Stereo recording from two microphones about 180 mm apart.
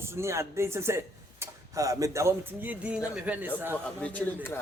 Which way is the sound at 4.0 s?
10° left (ahead or behind).